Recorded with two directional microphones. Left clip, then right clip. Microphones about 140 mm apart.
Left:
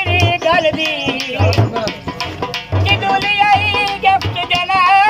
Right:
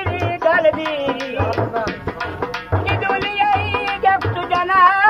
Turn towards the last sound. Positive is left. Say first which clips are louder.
# left 2 dB
turn(degrees=10)  # may be behind; listen again after turning